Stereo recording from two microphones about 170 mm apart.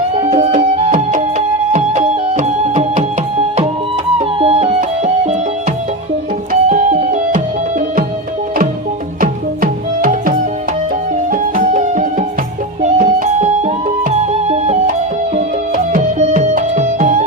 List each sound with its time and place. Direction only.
0.2 s music: 35° right (ahead or behind)
4.2 s music: 35° right (ahead or behind)
6.5 s music: 45° right (ahead or behind)
9.2 s music: 55° right (ahead or behind)